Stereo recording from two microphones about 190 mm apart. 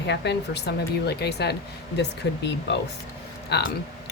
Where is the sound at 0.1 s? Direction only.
60° left (ahead or behind).